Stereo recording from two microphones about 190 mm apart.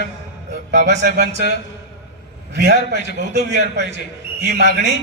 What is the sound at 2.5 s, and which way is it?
A man's voice, 60° right (ahead or behind).